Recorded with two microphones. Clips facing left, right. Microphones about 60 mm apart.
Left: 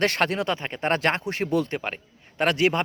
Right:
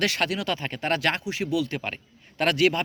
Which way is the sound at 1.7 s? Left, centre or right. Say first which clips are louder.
Left 2 dB; left.